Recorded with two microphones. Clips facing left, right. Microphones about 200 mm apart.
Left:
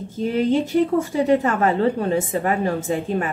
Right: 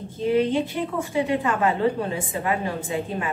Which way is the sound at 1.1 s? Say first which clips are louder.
Left 1 dB; 40° left (ahead or behind).